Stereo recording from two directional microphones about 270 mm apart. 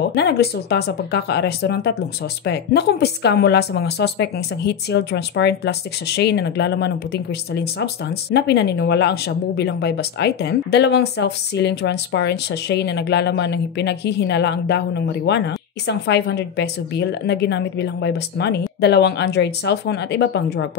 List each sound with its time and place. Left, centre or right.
0.1 s speech: left